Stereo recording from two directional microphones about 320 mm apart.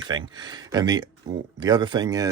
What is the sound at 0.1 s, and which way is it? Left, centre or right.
Speech, centre.